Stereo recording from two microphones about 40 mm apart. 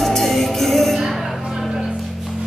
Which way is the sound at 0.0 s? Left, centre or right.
Centre.